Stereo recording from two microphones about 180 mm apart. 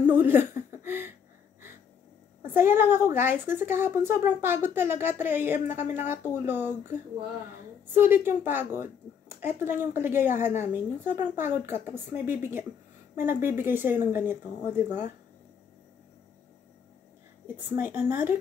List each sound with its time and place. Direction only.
0.1 s a sound: 10° right (ahead or behind)
2.4 s a woman's voice: 15° right (ahead or behind)
17.6 s a woman's voice: 10° right (ahead or behind)